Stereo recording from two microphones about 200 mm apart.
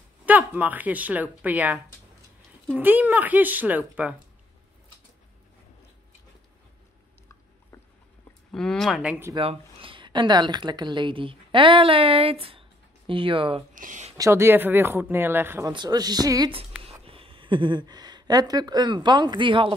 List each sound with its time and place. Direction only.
0.2 s speech: 5° right (ahead or behind)
7.7 s a sound: 10° left (ahead or behind)
8.5 s speech: 5° left (ahead or behind)
9.3 s a woman's voice: 25° right (ahead or behind)
13.7 s speech: 40° right (ahead or behind)
14.1 s speech: 15° right (ahead or behind)